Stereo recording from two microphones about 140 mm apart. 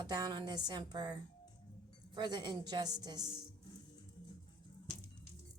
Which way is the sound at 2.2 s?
30° right (ahead or behind).